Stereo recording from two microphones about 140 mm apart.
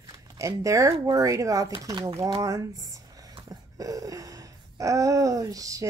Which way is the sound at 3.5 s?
25° right (ahead or behind).